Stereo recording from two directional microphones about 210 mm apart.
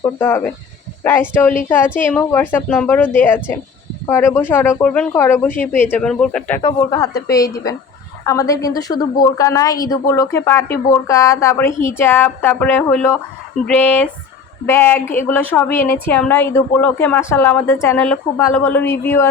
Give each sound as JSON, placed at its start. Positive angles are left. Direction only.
{"t": 0.2, "sound": "a woman's voice", "side_deg": 10}
{"t": 6.6, "sound": "a woman's voice", "side_deg": 15}